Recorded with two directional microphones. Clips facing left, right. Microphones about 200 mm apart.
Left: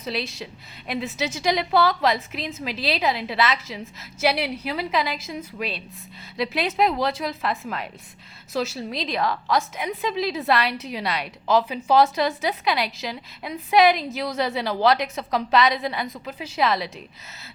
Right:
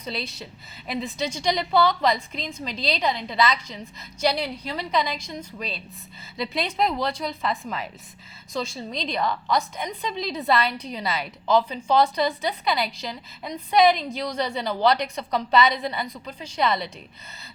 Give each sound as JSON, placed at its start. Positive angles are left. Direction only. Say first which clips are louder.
{"t": 0.0, "sound": "a woman's voice", "louder": "left 3 dB", "side_deg": 0}